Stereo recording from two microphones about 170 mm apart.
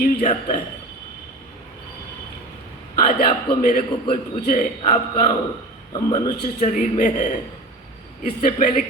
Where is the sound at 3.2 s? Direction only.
55° left (ahead or behind).